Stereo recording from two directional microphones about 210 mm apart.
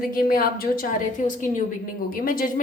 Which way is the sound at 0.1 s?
45° left (ahead or behind).